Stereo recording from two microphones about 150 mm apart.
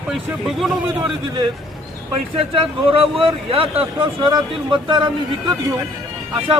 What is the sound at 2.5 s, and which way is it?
Speech, 35° right (ahead or behind).